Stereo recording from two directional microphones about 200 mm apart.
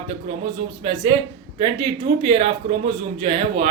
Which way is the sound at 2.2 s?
25° right (ahead or behind).